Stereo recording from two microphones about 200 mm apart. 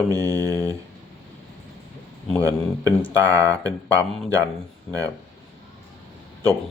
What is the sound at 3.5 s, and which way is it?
Speech, 15° right (ahead or behind).